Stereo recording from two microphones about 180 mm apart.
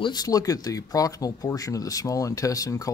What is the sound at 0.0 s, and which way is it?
Speech, 20° left (ahead or behind).